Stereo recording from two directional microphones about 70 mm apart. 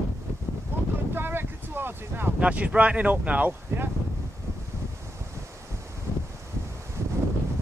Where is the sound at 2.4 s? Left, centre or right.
Centre.